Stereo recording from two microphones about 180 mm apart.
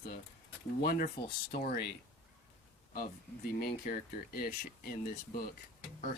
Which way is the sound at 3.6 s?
55° left (ahead or behind).